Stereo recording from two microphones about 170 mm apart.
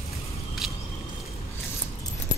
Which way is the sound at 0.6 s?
Centre (ahead or behind).